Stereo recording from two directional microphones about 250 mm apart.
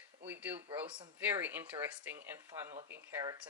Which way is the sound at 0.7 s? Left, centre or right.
Centre.